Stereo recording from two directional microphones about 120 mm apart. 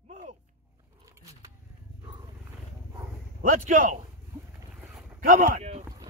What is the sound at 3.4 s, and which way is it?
Speech, 90° right.